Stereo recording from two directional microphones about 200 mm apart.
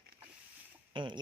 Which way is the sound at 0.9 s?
25° right (ahead or behind).